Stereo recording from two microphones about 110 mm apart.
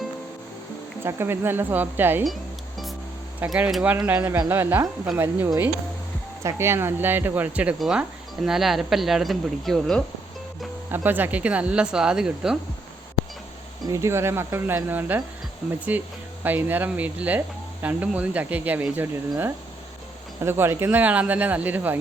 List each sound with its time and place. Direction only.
1.0 s speech: 20° right (ahead or behind)
2.2 s music: centre (ahead or behind)
3.4 s speech: 10° right (ahead or behind)
10.9 s speech: 15° right (ahead or behind)
13.8 s speech: 30° right (ahead or behind)